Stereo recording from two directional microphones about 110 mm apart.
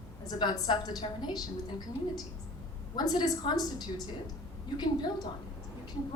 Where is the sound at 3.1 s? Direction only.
45° left (ahead or behind).